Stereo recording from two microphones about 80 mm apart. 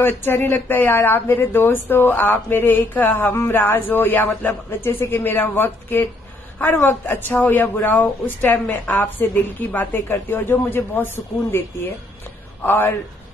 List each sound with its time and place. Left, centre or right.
0.0 s a man's voice: left